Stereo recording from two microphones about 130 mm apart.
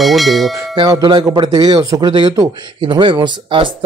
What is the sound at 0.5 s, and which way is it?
Speech, 30° right (ahead or behind).